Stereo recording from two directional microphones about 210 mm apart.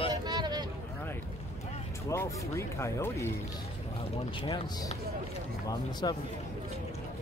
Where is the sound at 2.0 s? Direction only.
15° left (ahead or behind).